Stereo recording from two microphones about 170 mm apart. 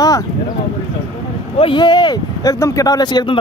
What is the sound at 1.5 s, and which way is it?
Speech, 30° left (ahead or behind).